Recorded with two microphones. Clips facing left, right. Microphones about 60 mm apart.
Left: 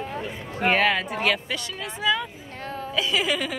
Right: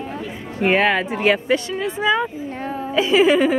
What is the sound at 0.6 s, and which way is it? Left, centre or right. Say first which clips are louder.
A woman's voice: right 4 dB; right.